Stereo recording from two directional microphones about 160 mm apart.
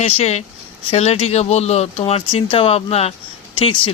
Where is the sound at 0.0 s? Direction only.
40° left (ahead or behind).